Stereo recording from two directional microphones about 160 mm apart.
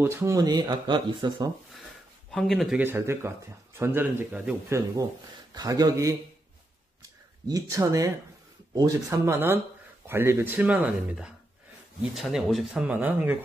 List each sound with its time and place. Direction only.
0.0 s speech: 15° right (ahead or behind)
2.3 s speech: centre (ahead or behind)
2.8 s speech: 15° right (ahead or behind)
7.0 s a sound: 20° right (ahead or behind)
8.7 s speech: 20° right (ahead or behind)